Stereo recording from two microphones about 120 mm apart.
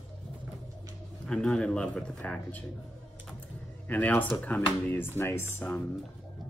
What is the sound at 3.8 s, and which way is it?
Speech, 15° left (ahead or behind).